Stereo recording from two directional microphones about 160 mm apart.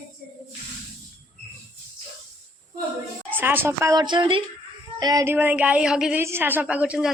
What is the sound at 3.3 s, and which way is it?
A woman's voice, 10° right (ahead or behind).